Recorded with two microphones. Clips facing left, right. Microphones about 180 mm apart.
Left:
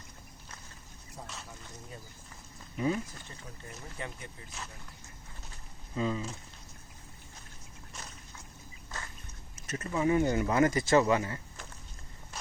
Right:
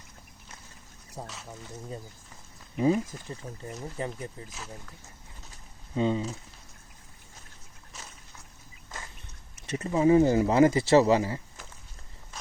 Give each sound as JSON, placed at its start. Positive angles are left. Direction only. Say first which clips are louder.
{"t": 1.2, "sound": "speech", "louder": "right 6 dB", "side_deg": -35}
{"t": 2.7, "sound": "speech", "louder": "right 6 dB", "side_deg": -30}
{"t": 6.0, "sound": "speech", "louder": "right 5 dB", "side_deg": -25}
{"t": 7.9, "sound": "boat", "louder": "even", "side_deg": 0}
{"t": 9.7, "sound": "speech", "louder": "right 7 dB", "side_deg": -25}